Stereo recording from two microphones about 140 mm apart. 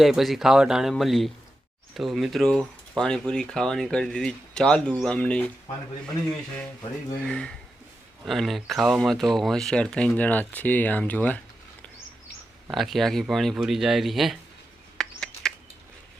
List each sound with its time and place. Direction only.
0.0 s speech: centre (ahead or behind)
7.3 s speech: 5° left (ahead or behind)
12.7 s speech: centre (ahead or behind)
14.9 s a sound: 5° left (ahead or behind)